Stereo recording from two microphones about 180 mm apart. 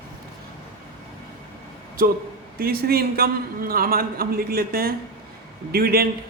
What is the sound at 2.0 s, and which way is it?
A man's voice, 55° right (ahead or behind).